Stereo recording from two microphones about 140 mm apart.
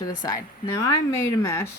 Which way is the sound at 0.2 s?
25° left (ahead or behind).